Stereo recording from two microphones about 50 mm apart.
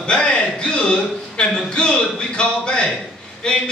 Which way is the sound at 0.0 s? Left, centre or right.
Centre.